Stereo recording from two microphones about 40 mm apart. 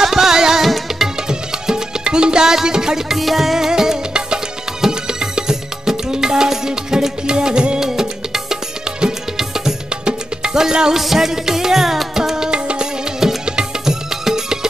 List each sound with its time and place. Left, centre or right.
0.0 s music: centre
1.7 s music: right
3.2 s music: centre